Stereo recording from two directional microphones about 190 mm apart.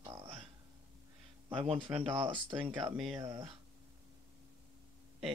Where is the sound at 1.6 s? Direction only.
30° right (ahead or behind).